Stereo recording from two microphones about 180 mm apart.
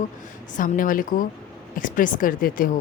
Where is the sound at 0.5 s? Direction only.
50° left (ahead or behind).